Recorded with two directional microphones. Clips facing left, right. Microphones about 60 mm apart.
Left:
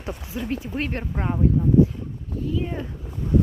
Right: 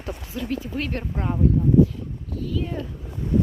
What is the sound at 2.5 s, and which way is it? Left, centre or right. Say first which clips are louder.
Speech: left 1 dB; left.